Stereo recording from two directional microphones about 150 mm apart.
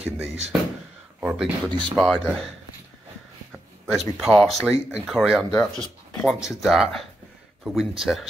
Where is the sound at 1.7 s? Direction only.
30° right (ahead or behind).